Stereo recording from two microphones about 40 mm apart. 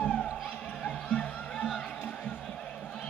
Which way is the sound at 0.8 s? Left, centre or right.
Left.